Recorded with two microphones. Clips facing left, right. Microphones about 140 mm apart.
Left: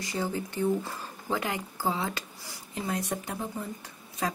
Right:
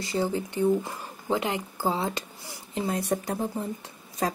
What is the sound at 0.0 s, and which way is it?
A woman's voice, 30° right (ahead or behind).